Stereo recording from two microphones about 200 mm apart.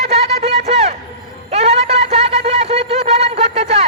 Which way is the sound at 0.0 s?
30° right (ahead or behind).